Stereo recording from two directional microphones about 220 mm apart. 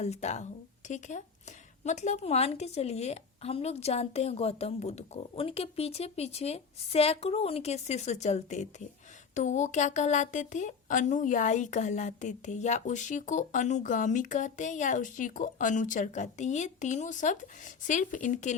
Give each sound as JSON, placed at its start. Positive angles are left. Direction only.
{"t": 0.0, "sound": "a woman's voice", "side_deg": 30}